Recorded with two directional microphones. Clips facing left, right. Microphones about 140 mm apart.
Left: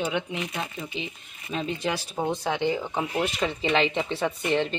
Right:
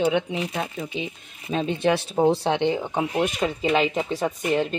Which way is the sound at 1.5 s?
25° right (ahead or behind).